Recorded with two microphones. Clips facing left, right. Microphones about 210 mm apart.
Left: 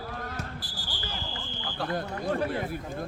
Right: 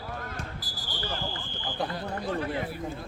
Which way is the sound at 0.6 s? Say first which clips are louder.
Right 1 dB; 30° left (ahead or behind).